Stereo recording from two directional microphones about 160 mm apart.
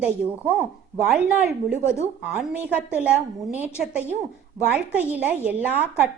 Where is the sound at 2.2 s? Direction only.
10° right (ahead or behind).